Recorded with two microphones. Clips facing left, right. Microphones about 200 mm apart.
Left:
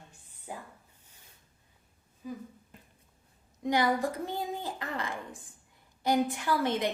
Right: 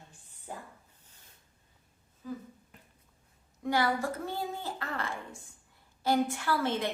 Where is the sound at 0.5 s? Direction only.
10° left (ahead or behind).